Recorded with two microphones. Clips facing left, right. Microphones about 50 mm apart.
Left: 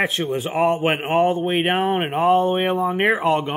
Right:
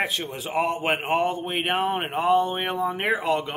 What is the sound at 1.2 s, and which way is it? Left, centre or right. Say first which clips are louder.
Speech: left 7 dB; left.